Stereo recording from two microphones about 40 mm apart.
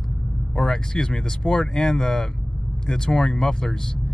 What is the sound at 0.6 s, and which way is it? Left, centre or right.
Speech, centre.